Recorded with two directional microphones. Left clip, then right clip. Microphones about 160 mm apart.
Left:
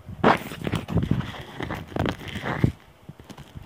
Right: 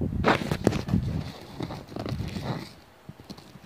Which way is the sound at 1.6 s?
60° left (ahead or behind).